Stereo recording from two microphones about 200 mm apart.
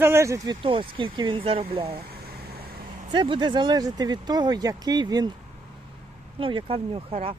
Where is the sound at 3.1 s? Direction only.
25° right (ahead or behind).